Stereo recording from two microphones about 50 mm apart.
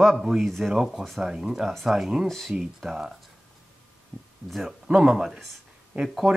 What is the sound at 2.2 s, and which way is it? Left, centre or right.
Speech, centre.